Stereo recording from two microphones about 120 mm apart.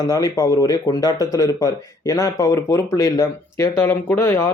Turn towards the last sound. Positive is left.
turn(degrees=20)  # may be behind; listen again after turning